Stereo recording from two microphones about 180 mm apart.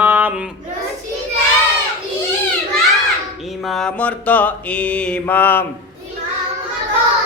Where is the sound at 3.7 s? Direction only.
5° left (ahead or behind).